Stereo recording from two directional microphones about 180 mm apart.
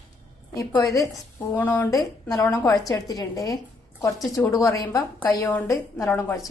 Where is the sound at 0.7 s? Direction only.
10° left (ahead or behind).